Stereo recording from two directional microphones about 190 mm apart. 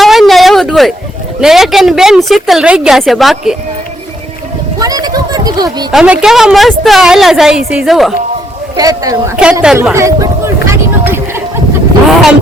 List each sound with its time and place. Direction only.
0.0 s a sound: centre (ahead or behind)
1.4 s a woman's voice: centre (ahead or behind)
4.8 s a sound: 20° right (ahead or behind)
5.9 s a woman's voice: 5° right (ahead or behind)
8.7 s speech: 20° right (ahead or behind)
9.3 s a woman's voice: 5° right (ahead or behind)
9.9 s speech: 15° right (ahead or behind)
11.0 s a sound: 10° right (ahead or behind)
12.0 s vehicle: centre (ahead or behind)